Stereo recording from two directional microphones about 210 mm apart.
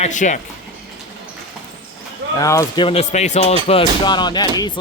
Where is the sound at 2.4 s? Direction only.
15° left (ahead or behind).